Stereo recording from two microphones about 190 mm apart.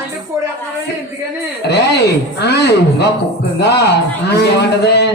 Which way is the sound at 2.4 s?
60° left (ahead or behind).